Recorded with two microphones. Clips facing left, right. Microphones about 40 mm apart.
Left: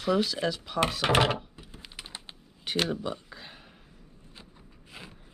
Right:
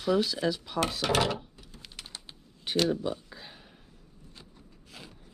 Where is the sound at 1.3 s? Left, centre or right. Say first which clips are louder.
Left 3 dB; centre.